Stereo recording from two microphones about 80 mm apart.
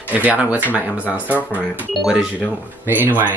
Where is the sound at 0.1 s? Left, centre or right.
Centre.